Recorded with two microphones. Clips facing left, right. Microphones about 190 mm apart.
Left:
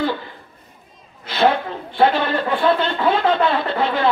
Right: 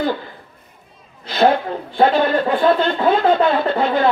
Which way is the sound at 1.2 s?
45° right (ahead or behind).